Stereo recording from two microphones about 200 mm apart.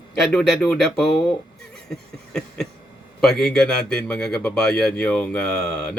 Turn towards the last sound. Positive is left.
turn(degrees=5)  # may be behind; listen again after turning